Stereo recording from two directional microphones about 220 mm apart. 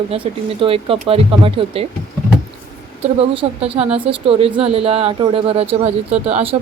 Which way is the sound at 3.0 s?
25° right (ahead or behind).